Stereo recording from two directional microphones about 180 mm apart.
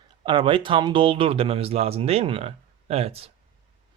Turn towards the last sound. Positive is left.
turn(degrees=-35)  # may be behind; listen again after turning